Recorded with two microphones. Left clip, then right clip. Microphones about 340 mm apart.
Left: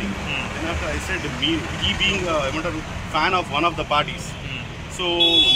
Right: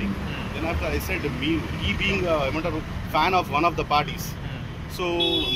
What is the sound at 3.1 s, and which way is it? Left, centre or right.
Speech, centre.